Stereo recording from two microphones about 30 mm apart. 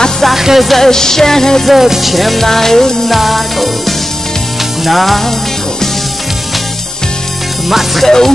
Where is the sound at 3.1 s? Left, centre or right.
Centre.